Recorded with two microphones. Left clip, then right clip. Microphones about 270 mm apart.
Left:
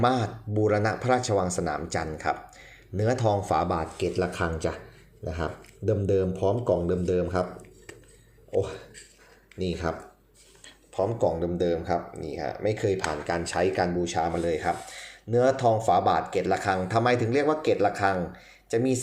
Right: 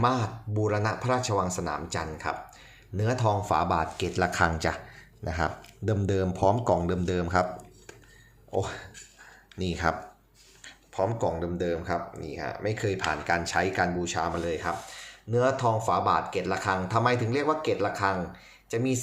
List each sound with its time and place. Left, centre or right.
0.0 s speech: centre
8.5 s speech: centre